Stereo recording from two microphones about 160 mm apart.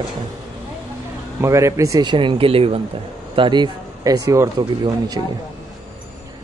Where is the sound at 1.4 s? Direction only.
20° right (ahead or behind).